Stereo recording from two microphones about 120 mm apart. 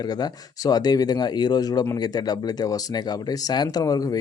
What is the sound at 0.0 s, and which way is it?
Speech, 35° left (ahead or behind).